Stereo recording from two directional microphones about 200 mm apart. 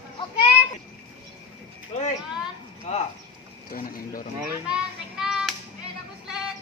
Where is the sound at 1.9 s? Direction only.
35° left (ahead or behind).